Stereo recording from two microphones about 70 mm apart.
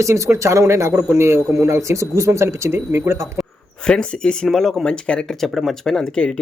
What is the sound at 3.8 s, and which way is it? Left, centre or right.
Speech, centre.